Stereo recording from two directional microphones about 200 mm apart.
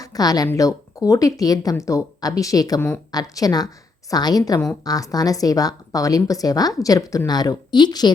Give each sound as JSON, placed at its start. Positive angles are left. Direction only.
{"t": 0.0, "sound": "a woman's voice", "side_deg": 20}